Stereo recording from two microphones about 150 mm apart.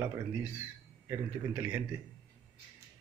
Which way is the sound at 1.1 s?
15° right (ahead or behind).